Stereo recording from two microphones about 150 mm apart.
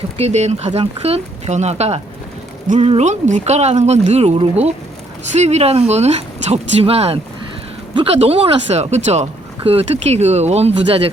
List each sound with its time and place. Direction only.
0.2 s speech: 45° right (ahead or behind)